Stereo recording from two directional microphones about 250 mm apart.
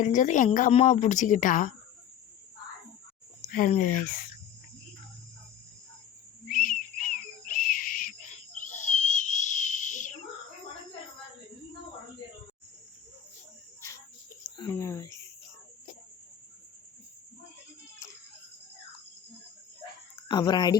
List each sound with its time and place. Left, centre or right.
0.0 s a woman's voice: left
3.4 s speech: left
6.5 s a sound: left
8.7 s a sound: left
9.0 s whistle: left
14.5 s speech: centre
20.2 s speech: centre